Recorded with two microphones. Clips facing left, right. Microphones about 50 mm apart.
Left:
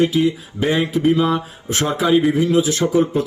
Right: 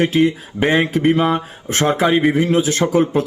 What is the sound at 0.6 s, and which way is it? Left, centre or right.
Mantra, right.